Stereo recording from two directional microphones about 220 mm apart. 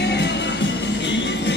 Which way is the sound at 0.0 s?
50° left (ahead or behind).